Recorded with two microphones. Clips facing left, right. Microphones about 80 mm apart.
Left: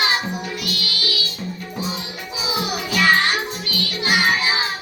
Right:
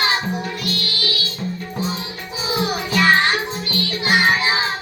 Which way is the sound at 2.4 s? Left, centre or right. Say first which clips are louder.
Right 3 dB; right.